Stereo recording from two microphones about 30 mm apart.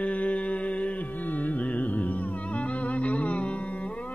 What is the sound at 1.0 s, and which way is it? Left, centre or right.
Music, left.